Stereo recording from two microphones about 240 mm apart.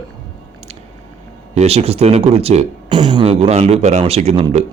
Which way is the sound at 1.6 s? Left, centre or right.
Right.